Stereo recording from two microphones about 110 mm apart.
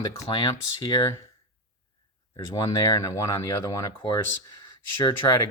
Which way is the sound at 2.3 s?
35° left (ahead or behind).